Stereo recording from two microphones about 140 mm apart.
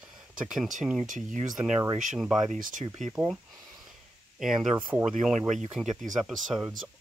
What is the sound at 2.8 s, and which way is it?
Speech, 45° right (ahead or behind).